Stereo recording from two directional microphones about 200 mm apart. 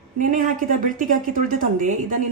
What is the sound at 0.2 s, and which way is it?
A woman's voice, 40° right (ahead or behind).